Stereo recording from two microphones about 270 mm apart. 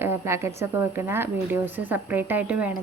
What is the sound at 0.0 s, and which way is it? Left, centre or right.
Speech, centre.